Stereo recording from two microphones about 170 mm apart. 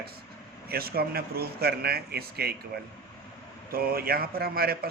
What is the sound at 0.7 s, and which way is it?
A man's voice, 65° right (ahead or behind).